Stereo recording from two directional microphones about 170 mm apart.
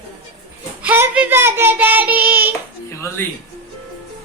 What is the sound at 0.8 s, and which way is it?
Child singing, 10° right (ahead or behind).